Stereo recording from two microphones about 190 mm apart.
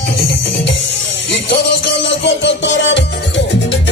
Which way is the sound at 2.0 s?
70° left (ahead or behind).